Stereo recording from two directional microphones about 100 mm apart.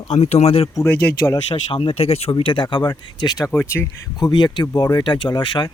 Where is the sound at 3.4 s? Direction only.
25° left (ahead or behind).